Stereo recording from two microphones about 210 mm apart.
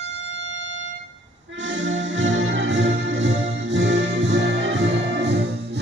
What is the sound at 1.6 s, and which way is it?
Music, 60° right (ahead or behind).